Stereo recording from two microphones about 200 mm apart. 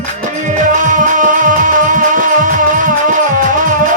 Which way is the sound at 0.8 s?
40° right (ahead or behind).